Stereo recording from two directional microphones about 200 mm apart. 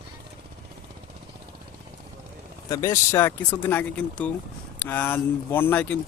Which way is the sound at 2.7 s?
15° left (ahead or behind).